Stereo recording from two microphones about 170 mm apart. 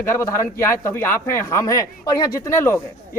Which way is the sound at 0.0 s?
15° left (ahead or behind).